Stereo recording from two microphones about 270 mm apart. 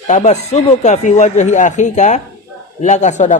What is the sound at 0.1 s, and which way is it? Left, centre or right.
Speech, left.